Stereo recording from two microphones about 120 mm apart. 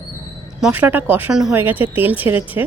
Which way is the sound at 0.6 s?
15° right (ahead or behind).